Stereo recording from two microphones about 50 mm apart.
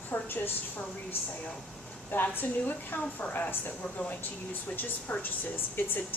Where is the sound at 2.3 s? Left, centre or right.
Left.